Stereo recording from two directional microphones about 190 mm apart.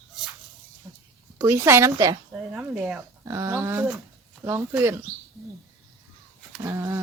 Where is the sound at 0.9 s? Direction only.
20° right (ahead or behind).